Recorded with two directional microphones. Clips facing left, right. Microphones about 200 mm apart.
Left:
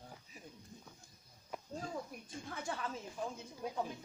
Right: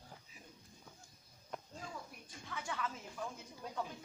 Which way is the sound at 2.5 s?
35° left (ahead or behind).